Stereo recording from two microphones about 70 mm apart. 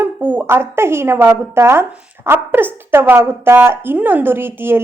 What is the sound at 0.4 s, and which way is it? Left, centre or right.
Speech, right.